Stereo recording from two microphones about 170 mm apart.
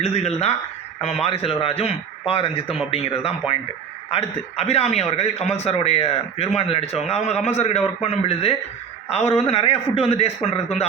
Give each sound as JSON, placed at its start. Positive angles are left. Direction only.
{"t": 0.0, "sound": "speech", "side_deg": 40}